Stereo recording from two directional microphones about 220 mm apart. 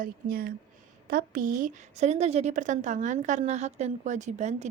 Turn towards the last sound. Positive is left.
turn(degrees=-30)  # may be behind; listen again after turning